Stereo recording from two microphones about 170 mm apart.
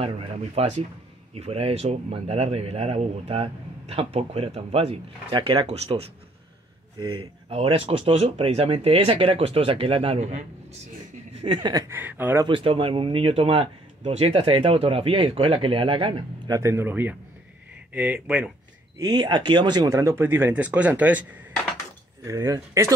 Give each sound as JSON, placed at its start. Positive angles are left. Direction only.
{"t": 0.6, "sound": "a man's voice", "side_deg": -40}
{"t": 5.3, "sound": "a man's voice", "side_deg": -25}
{"t": 7.4, "sound": "a man's voice", "side_deg": -35}
{"t": 11.4, "sound": "speech", "side_deg": -30}
{"t": 11.9, "sound": "speech", "side_deg": -10}
{"t": 12.4, "sound": "a man's voice", "side_deg": -30}
{"t": 18.9, "sound": "speech", "side_deg": -25}